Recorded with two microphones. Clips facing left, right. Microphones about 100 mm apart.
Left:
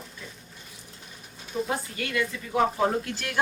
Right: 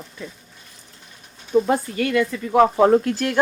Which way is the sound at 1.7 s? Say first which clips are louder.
Right 10 dB; 60° right (ahead or behind).